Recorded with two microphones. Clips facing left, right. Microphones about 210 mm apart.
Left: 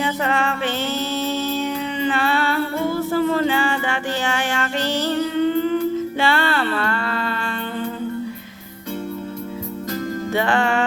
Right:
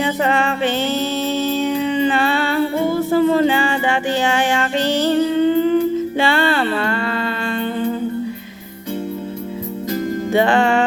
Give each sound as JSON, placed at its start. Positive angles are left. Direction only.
{"t": 0.0, "sound": "music", "side_deg": -20}
{"t": 10.3, "sound": "music", "side_deg": -20}